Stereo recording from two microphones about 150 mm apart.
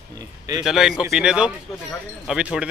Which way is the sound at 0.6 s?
5° right (ahead or behind).